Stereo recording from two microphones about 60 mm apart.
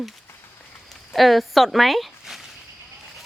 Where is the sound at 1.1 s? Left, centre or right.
Centre.